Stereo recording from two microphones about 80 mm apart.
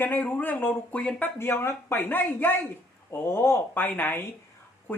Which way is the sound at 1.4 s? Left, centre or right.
Left.